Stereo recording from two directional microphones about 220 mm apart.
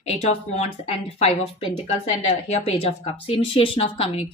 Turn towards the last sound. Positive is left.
turn(degrees=25)  # may be behind; listen again after turning